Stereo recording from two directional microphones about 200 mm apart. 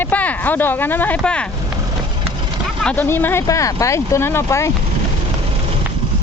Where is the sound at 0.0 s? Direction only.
10° left (ahead or behind).